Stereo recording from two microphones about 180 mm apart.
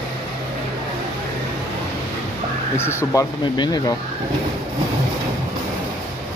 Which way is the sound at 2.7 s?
15° left (ahead or behind).